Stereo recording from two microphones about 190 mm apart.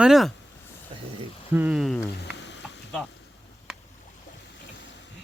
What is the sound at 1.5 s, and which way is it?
Speech, 10° right (ahead or behind).